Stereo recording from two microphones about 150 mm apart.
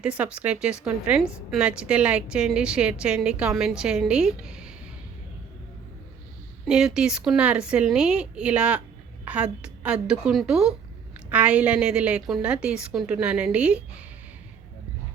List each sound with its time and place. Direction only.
0.0 s a woman's voice: 10° right (ahead or behind)
6.7 s a woman's voice: 5° right (ahead or behind)